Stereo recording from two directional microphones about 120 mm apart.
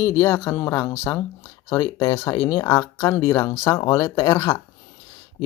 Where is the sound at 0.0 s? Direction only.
25° left (ahead or behind).